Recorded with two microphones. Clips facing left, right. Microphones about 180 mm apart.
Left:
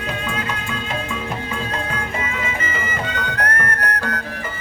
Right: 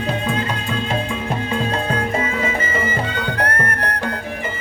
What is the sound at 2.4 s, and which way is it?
Music, 35° right (ahead or behind).